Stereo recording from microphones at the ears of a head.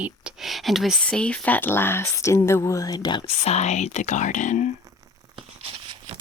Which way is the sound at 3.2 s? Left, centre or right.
Left.